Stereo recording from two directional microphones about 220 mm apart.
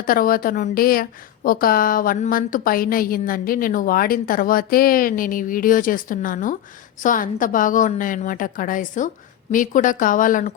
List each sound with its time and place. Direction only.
0.0 s a woman's voice: 40° left (ahead or behind)